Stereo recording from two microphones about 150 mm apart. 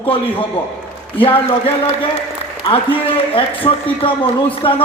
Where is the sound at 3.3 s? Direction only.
35° left (ahead or behind).